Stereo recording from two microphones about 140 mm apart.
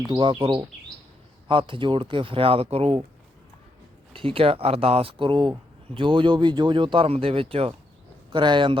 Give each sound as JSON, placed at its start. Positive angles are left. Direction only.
{"t": 0.1, "sound": "speech", "side_deg": -35}
{"t": 1.5, "sound": "speech", "side_deg": -35}
{"t": 4.1, "sound": "speech", "side_deg": -40}